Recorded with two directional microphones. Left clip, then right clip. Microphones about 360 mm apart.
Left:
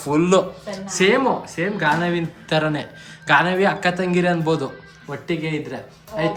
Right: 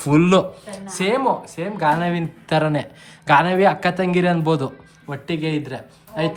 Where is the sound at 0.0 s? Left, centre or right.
Right.